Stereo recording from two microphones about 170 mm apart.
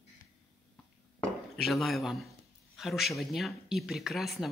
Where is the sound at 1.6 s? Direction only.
Centre (ahead or behind).